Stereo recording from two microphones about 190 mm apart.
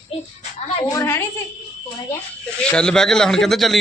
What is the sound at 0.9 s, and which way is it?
Speech, 15° left (ahead or behind).